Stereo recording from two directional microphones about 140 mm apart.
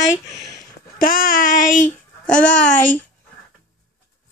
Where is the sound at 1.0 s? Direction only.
80° left.